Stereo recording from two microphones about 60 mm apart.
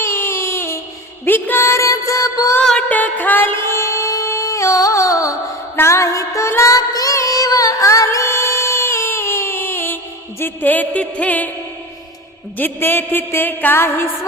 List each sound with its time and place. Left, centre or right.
0.0 s a sound: left
1.6 s music: left
2.9 s music: left
12.5 s music: left